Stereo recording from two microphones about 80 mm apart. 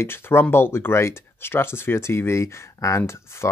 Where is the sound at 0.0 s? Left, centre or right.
Left.